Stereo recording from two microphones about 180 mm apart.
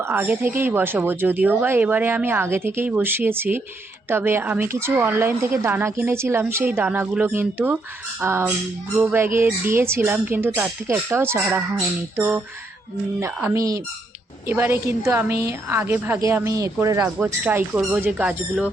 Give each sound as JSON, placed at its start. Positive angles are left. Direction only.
{"t": 0.0, "sound": "a woman's voice", "side_deg": -10}